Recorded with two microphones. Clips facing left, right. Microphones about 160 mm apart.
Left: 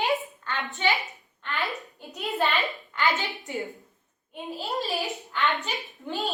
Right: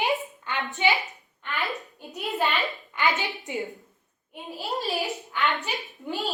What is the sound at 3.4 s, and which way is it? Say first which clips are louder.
Speech: right 1 dB; 20° right (ahead or behind).